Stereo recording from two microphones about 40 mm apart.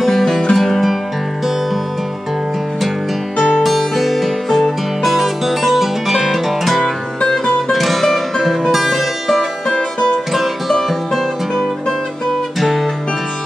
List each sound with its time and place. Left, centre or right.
0.0 s music: centre
0.6 s music: centre
3.6 s music: centre
9.8 s music: centre
10.7 s music: centre
12.5 s music: centre